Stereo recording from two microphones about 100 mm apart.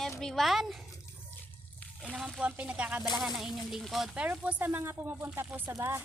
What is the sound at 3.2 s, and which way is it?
Speech, centre (ahead or behind).